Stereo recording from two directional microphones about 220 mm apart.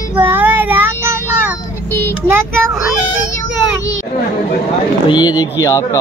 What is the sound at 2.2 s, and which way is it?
Speech, 10° right (ahead or behind).